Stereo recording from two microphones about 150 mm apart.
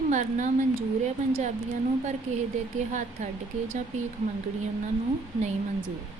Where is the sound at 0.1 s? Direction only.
55° right (ahead or behind).